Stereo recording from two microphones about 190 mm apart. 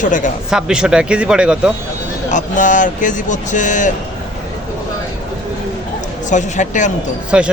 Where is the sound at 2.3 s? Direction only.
40° left (ahead or behind).